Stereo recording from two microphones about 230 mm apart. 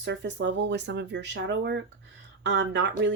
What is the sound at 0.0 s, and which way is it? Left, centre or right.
Speech, right.